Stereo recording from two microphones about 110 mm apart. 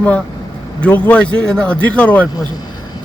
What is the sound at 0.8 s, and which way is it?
A man's voice, 15° left (ahead or behind).